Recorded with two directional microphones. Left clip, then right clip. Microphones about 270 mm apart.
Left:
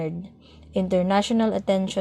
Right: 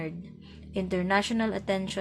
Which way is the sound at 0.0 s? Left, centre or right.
Left.